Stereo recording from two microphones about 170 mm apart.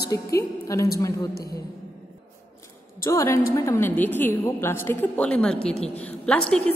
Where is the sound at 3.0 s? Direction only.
15° left (ahead or behind).